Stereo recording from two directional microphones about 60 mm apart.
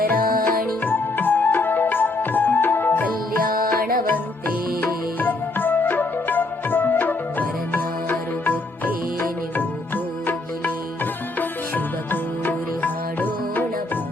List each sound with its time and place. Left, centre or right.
0.1 s music: left